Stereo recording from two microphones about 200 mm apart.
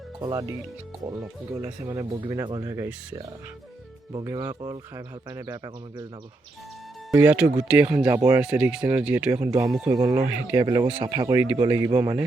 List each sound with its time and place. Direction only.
0.2 s speech: 20° right (ahead or behind)
1.5 s speech: 10° right (ahead or behind)
7.1 s speech: 10° right (ahead or behind)
10.2 s speech: 10° right (ahead or behind)
10.6 s speech: 20° right (ahead or behind)